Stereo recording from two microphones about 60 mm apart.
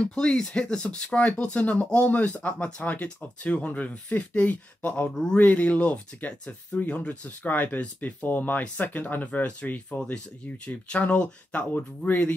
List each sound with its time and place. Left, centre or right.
0.0 s speech: centre
5.1 s speech: centre
5.4 s speech: left